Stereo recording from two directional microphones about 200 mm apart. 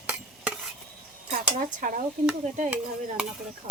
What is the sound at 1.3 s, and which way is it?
Speech, 40° right (ahead or behind).